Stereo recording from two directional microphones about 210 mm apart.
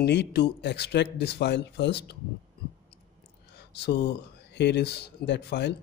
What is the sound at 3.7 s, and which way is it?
Speech, 55° left (ahead or behind).